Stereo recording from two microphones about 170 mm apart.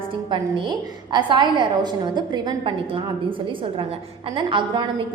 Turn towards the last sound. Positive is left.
turn(degrees=-30)  # may be behind; listen again after turning